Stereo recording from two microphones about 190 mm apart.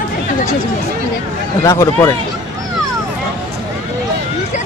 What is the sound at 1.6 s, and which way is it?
Speech, 15° left (ahead or behind).